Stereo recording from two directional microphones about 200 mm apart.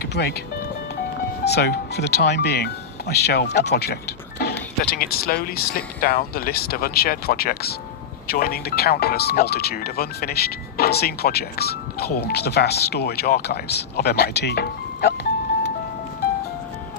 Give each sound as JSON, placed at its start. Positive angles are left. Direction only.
{"t": 0.1, "sound": "speech", "side_deg": 55}
{"t": 1.5, "sound": "speech", "side_deg": 55}